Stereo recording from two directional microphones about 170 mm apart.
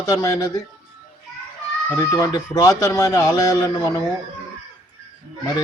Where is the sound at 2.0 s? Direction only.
20° left (ahead or behind).